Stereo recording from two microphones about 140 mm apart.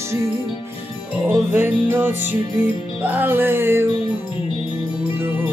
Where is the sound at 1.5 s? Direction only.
15° right (ahead or behind).